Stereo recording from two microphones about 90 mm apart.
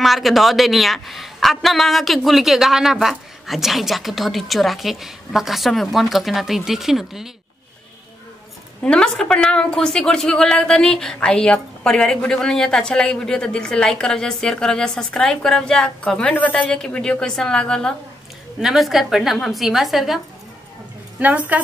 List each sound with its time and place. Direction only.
0.0 s a man's voice: centre (ahead or behind)
8.8 s a woman's voice: 10° left (ahead or behind)
18.6 s a man's voice: 5° right (ahead or behind)
21.2 s a woman's voice: 15° right (ahead or behind)